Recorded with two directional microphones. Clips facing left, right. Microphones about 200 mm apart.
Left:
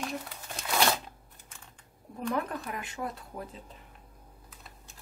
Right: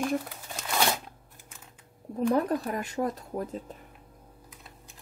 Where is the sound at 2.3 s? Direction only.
40° right (ahead or behind).